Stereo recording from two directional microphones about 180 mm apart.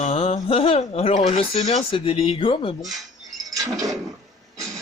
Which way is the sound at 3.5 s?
20° right (ahead or behind).